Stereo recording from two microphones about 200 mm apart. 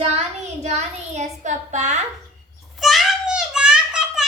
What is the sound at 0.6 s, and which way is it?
A child's voice, 35° right (ahead or behind).